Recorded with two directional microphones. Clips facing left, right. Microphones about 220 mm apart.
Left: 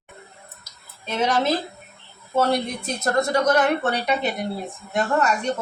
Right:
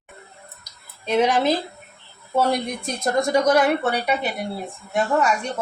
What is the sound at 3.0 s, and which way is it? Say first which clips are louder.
A woman's voice: right 1 dB; 10° right (ahead or behind).